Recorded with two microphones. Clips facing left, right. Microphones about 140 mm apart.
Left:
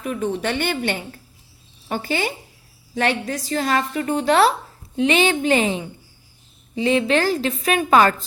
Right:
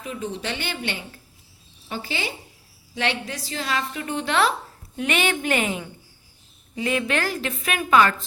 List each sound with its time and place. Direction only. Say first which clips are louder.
0.0 s a woman's voice: left 7 dB; 60° left (ahead or behind); by 8.1 s 35° left (ahead or behind)